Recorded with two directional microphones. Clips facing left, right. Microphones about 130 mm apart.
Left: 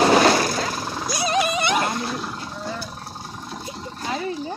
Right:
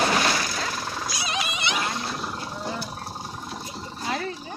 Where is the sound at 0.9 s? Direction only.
15° left (ahead or behind).